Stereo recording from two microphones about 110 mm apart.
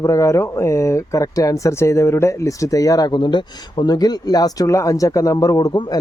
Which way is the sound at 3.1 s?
45° left (ahead or behind).